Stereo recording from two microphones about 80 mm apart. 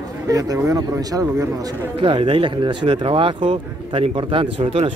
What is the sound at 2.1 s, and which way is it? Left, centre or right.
Speech, right.